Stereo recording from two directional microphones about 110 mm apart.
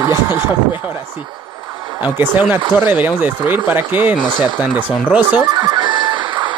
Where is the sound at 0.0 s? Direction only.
20° right (ahead or behind).